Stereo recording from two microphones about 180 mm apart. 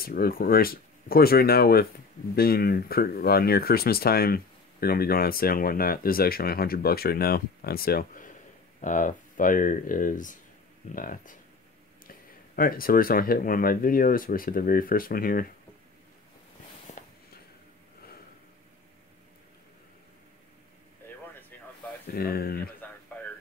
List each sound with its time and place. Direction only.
0.0 s speech: 55° left (ahead or behind)
17.0 s a sound: 45° left (ahead or behind)
22.0 s speech: 60° left (ahead or behind)
22.8 s radio: 10° left (ahead or behind)